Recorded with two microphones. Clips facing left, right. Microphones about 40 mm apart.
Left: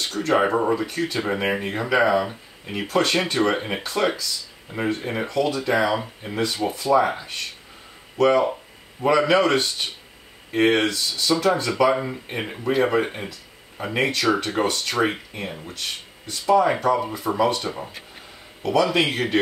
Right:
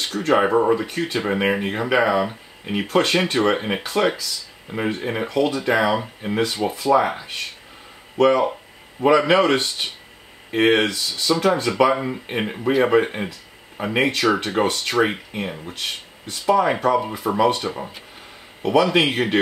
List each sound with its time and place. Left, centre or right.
0.0 s speech: centre
9.0 s speech: centre